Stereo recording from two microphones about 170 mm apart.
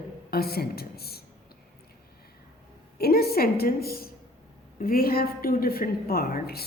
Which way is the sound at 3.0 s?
65° left (ahead or behind).